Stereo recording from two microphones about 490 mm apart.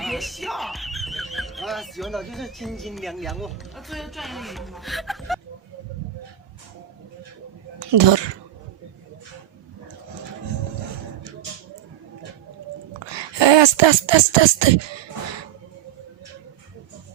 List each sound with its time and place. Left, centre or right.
0.0 s speech: centre
7.8 s a sound: right
13.1 s speech: right